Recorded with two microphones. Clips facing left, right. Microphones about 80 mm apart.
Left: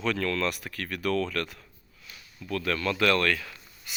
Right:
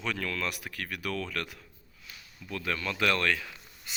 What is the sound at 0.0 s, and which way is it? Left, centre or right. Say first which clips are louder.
Speech: left 6 dB; centre.